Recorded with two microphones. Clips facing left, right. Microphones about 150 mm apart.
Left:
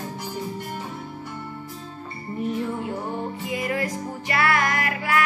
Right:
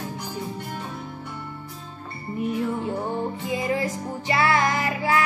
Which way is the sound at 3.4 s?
25° right (ahead or behind).